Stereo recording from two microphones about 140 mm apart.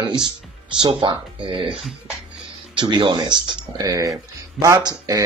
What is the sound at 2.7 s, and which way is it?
Speech, 35° right (ahead or behind).